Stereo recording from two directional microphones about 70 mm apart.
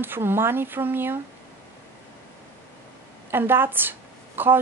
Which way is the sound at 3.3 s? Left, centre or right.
Right.